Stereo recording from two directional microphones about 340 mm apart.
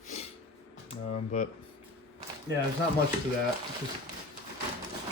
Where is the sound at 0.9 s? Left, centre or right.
Left.